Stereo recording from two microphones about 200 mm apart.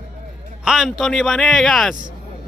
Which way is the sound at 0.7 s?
Centre (ahead or behind).